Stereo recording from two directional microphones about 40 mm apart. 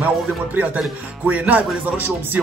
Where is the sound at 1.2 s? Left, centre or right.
Right.